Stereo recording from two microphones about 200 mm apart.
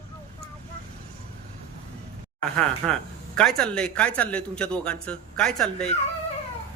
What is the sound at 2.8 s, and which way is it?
A man's voice, centre (ahead or behind).